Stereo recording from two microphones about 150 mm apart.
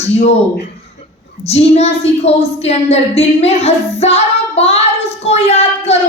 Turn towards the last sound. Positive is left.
turn(degrees=45)  # may be behind; listen again after turning